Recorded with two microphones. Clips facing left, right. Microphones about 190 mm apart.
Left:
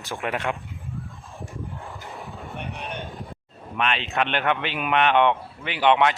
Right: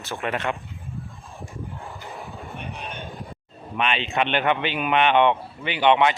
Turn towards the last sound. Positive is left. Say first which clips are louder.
# right 1 dB
turn(degrees=0)  # may be behind; listen again after turning